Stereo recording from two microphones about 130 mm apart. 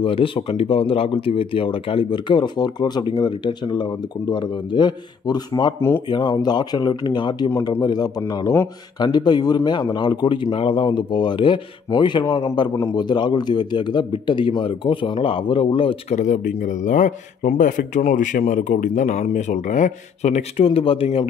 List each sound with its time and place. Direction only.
0.0 s speech: 45° left (ahead or behind)
5.8 s speech: 20° left (ahead or behind)
6.0 s speech: 35° left (ahead or behind)
16.2 s speech: 70° left (ahead or behind); by 21.3 s 45° left (ahead or behind)